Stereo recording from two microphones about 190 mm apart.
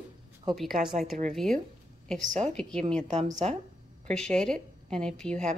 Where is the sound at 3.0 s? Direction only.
40° right (ahead or behind).